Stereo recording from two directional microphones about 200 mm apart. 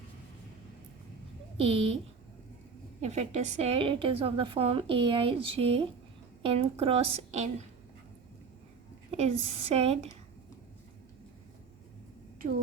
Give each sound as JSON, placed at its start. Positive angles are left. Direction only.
{"t": 1.5, "sound": "a woman's voice", "side_deg": -30}
{"t": 3.0, "sound": "a woman's voice", "side_deg": -35}
{"t": 9.1, "sound": "speech", "side_deg": -30}
{"t": 12.4, "sound": "speech", "side_deg": -30}